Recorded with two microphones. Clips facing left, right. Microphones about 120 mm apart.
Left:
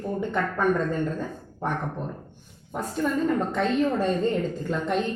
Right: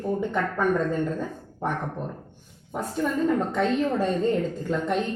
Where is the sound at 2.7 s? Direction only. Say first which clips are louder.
Even; 5° right (ahead or behind).